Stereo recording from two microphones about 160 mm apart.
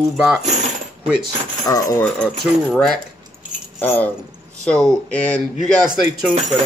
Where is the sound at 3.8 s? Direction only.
10° left (ahead or behind).